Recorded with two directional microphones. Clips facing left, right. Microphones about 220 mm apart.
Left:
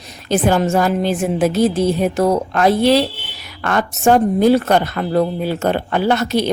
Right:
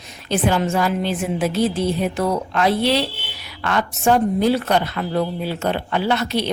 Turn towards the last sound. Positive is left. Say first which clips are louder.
# left 4 dB
turn(degrees=45)  # may be behind; listen again after turning